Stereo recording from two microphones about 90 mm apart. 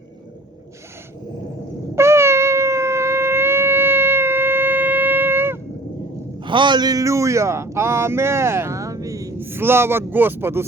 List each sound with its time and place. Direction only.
2.0 s shofar: 30° right (ahead or behind)
6.4 s speech: 60° right (ahead or behind); by 9.3 s 40° right (ahead or behind)
9.4 s speech: 25° right (ahead or behind)